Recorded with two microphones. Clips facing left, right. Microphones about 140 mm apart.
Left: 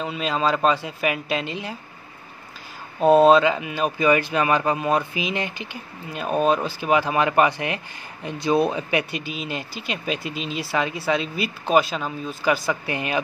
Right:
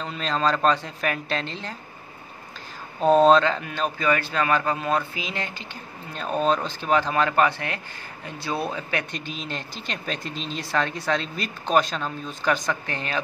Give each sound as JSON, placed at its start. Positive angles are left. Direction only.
{"t": 0.0, "sound": "speech", "side_deg": 5}
{"t": 3.0, "sound": "a man's voice", "side_deg": 5}
{"t": 9.1, "sound": "speech", "side_deg": 5}